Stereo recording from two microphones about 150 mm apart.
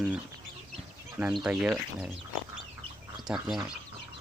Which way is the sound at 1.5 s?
5° right (ahead or behind).